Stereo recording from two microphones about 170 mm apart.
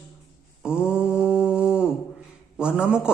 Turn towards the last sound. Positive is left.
turn(degrees=-5)  # may be behind; listen again after turning